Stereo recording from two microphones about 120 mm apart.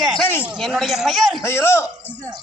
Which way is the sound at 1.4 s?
20° left (ahead or behind).